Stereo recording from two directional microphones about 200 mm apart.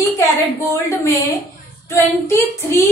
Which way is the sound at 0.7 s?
15° left (ahead or behind).